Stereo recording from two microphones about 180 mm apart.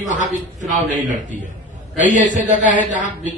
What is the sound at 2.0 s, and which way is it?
A man's voice, 45° right (ahead or behind).